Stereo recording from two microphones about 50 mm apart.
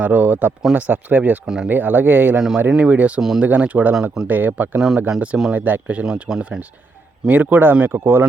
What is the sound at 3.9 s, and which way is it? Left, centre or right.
Speech, centre.